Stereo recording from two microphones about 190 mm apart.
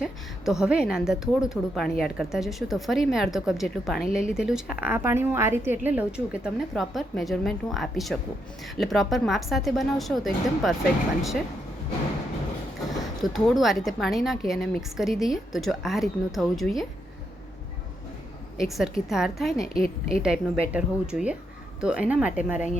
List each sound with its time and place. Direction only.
0.0 s a woman's voice: centre (ahead or behind)
13.2 s a woman's voice: centre (ahead or behind)
18.5 s a woman's voice: centre (ahead or behind)
19.7 s speech: 30° right (ahead or behind)
20.2 s a woman's voice: 5° right (ahead or behind)